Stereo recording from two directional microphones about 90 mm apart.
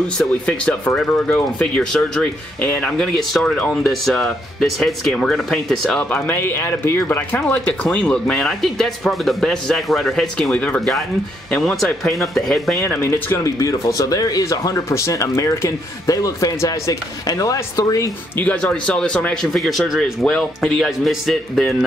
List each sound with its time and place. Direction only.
0.5 s speech: 10° left (ahead or behind)
2.6 s speech: 20° left (ahead or behind)
3.0 s speech: 5° left (ahead or behind)
6.2 s speech: 20° left (ahead or behind)
11.6 s speech: 5° left (ahead or behind)
12.8 s speech: 25° left (ahead or behind); by 18.1 s 40° left (ahead or behind)
18.4 s speech: 15° left (ahead or behind)